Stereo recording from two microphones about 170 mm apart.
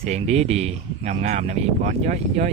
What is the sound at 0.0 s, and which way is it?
Speech, 40° right (ahead or behind).